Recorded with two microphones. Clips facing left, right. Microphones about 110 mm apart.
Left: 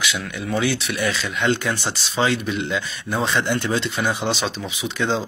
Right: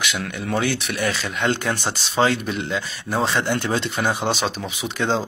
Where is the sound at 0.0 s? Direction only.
50° right (ahead or behind).